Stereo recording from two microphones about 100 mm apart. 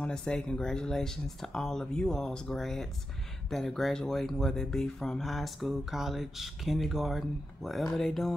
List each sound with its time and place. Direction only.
0.0 s speech: 5° left (ahead or behind)